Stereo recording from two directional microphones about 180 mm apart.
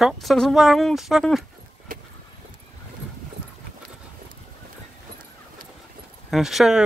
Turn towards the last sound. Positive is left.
turn(degrees=0)  # may be behind; listen again after turning